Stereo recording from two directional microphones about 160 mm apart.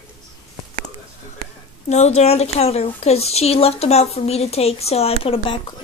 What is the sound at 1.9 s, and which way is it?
A woman's voice, 45° left (ahead or behind).